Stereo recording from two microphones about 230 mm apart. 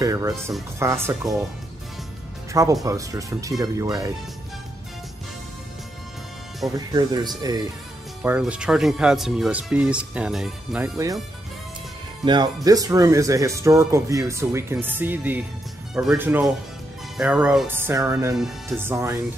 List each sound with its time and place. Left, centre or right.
0.0 s music: centre
0.7 s speech: centre
2.5 s speech: centre
6.9 s speech: centre
8.2 s speech: centre
12.6 s speech: centre
18.3 s speech: centre